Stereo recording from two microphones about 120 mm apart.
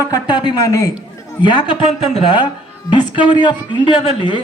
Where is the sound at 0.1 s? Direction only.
40° left (ahead or behind).